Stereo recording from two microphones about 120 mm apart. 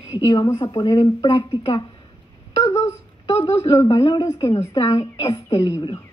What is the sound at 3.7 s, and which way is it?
Speech, 30° left (ahead or behind).